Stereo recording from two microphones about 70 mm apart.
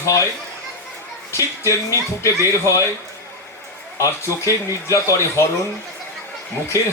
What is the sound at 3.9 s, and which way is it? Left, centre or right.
Speech, left.